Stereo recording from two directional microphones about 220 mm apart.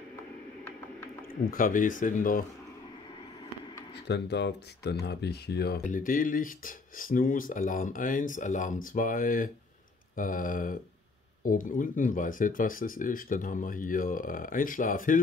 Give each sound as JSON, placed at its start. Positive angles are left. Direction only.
{"t": 1.5, "sound": "speech", "side_deg": 35}
{"t": 4.1, "sound": "speech", "side_deg": 50}